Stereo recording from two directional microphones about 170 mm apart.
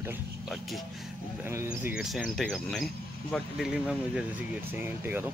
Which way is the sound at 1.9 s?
5° right (ahead or behind).